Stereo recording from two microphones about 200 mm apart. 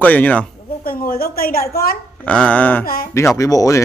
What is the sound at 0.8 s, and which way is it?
A woman's voice, 45° left (ahead or behind).